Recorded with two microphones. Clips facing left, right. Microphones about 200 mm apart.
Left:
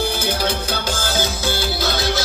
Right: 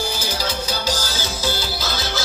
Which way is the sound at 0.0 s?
60° left (ahead or behind).